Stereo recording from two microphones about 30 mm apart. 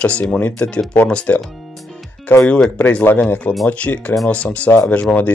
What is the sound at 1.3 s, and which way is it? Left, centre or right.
Speech, left.